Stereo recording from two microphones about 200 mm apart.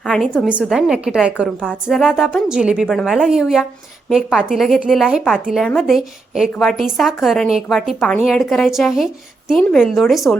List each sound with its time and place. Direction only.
0.0 s a woman's voice: centre (ahead or behind)